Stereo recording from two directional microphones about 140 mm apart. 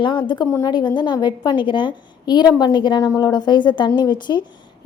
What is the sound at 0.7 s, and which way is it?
A woman's voice, 30° left (ahead or behind).